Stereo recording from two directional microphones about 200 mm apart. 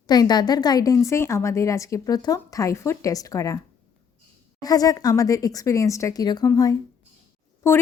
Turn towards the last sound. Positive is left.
turn(degrees=10)  # may be behind; listen again after turning